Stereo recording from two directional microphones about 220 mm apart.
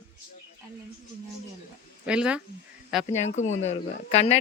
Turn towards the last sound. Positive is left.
turn(degrees=30)  # may be behind; listen again after turning